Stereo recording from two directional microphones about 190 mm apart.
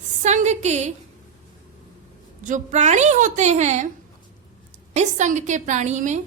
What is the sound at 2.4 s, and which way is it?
A woman's voice, 40° right (ahead or behind).